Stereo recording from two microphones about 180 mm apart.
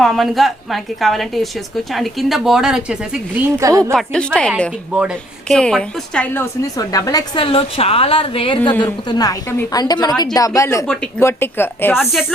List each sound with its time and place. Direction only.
0.0 s a woman's voice: centre (ahead or behind); by 3.9 s 20° right (ahead or behind)
3.9 s a woman's voice: 5° left (ahead or behind)